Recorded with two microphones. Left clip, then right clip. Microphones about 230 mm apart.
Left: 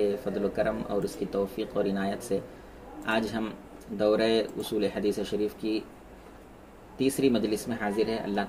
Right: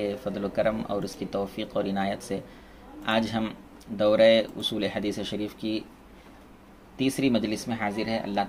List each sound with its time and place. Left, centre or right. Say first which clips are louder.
0.0 s speech: left 2 dB; right
7.2 s speech: left 1 dB; right